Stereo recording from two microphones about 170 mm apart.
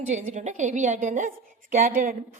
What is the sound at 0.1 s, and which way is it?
A woman's voice, 45° right (ahead or behind).